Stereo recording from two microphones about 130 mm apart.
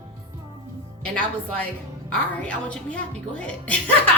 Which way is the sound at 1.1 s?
10° left (ahead or behind).